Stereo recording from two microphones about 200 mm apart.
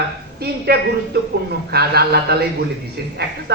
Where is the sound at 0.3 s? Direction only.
55° right (ahead or behind).